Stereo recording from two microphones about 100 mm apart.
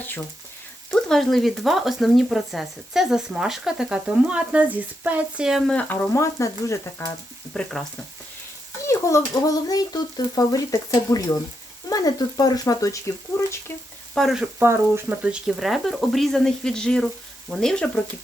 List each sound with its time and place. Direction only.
0.9 s speech: 5° left (ahead or behind)
5.6 s speech: 15° left (ahead or behind)
6.1 s frying: 30° left (ahead or behind)
7.5 s speech: 5° left (ahead or behind)
8.9 s speech: 30° left (ahead or behind)
14.2 s speech: centre (ahead or behind)
14.6 s speech: 25° right (ahead or behind)
15.1 s speech: 10° right (ahead or behind); by 18.0 s 5° left (ahead or behind)